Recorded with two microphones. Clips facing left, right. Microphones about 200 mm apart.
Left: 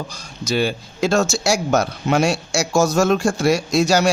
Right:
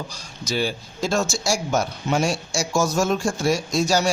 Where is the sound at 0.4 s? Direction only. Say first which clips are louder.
Left 4 dB; 60° left (ahead or behind).